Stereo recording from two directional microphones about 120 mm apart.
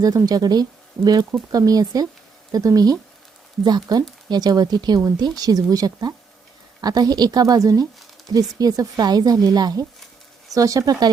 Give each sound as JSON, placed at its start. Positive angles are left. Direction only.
{"t": 0.0, "sound": "speech", "side_deg": -30}